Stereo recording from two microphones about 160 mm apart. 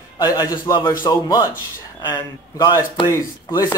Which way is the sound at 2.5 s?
30° left (ahead or behind).